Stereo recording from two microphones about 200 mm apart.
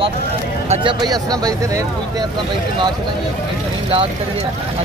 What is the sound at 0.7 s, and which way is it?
Speech, 25° right (ahead or behind).